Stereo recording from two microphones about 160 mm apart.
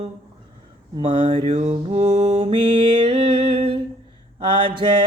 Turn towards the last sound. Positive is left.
turn(degrees=-35)  # may be behind; listen again after turning